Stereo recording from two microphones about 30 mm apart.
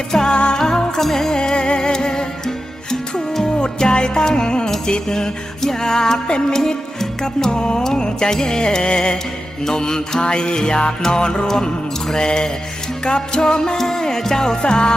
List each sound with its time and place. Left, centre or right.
0.3 s music: left
0.9 s music: centre
1.4 s music: left
3.4 s music: left
7.5 s music: left
11.4 s music: centre